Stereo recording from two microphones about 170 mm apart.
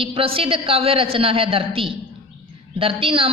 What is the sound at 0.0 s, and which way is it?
A man's voice, 35° right (ahead or behind).